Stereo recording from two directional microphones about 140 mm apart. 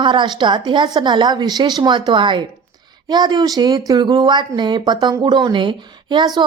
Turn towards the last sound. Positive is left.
turn(degrees=-30)  # may be behind; listen again after turning